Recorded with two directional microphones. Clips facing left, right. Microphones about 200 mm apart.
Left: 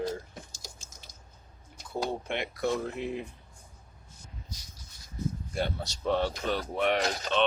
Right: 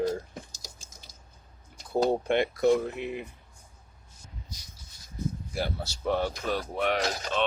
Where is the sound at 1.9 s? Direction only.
50° right (ahead or behind).